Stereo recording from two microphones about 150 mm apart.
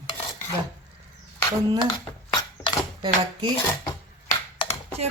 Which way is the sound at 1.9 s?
30° left (ahead or behind).